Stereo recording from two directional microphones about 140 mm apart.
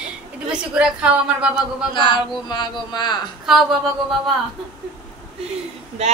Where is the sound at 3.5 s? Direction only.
5° right (ahead or behind).